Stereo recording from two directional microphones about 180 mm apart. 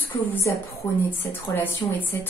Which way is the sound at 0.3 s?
15° left (ahead or behind).